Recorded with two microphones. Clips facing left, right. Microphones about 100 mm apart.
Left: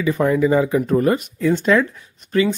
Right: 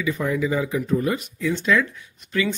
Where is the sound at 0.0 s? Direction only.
50° left (ahead or behind).